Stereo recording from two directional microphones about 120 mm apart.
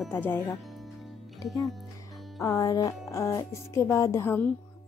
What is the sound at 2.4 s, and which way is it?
Speech, 30° left (ahead or behind).